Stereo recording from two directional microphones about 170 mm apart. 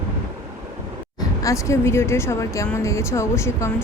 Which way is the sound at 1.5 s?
15° left (ahead or behind).